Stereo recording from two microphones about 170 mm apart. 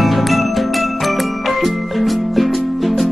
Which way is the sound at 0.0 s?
Centre (ahead or behind).